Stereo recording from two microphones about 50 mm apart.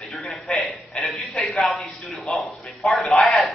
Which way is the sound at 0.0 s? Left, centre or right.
Centre.